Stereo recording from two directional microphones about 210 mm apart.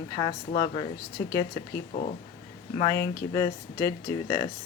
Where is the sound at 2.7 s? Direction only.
20° left (ahead or behind).